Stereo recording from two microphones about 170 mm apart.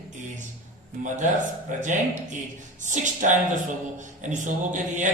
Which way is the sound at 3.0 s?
45° right (ahead or behind).